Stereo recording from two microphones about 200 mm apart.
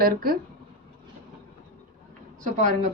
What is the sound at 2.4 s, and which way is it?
Speech, 40° right (ahead or behind).